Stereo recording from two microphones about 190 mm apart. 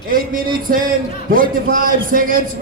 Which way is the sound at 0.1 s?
50° right (ahead or behind).